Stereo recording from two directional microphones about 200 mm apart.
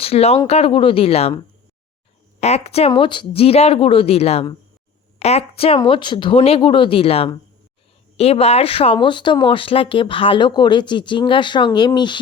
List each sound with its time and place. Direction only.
0.0 s speech: 30° left (ahead or behind)
2.4 s speech: 30° left (ahead or behind)